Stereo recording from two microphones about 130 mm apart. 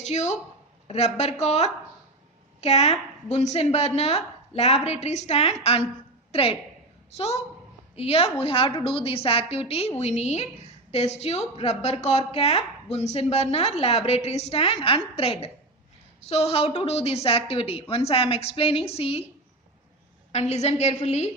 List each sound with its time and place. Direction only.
0.0 s a woman's voice: 60° left (ahead or behind)
20.3 s a woman's voice: 55° left (ahead or behind)